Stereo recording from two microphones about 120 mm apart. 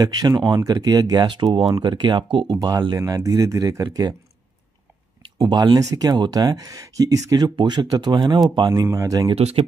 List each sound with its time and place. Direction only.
0.0 s speech: 35° right (ahead or behind)
5.2 s speech: 35° right (ahead or behind)
8.8 s speech: 25° right (ahead or behind)
9.3 s speech: 60° right (ahead or behind)